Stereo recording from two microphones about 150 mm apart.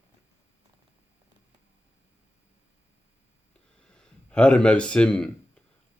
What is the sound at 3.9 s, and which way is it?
Speech, 5° left (ahead or behind).